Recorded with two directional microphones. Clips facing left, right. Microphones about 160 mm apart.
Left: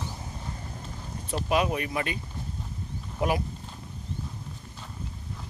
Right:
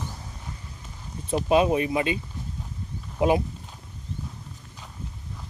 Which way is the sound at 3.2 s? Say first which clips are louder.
Right 6 dB; 20° right (ahead or behind).